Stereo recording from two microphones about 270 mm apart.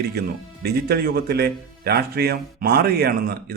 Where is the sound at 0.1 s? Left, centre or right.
Right.